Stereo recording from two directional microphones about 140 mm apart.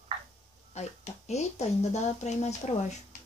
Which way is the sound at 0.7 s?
55° left (ahead or behind).